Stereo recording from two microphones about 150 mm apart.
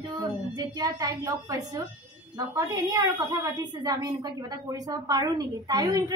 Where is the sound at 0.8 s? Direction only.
25° right (ahead or behind).